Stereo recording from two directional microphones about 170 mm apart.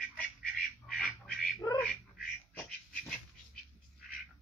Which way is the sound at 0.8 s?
5° left (ahead or behind).